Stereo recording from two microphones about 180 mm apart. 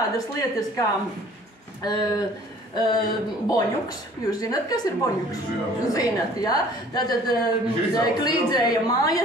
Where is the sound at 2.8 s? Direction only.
20° left (ahead or behind).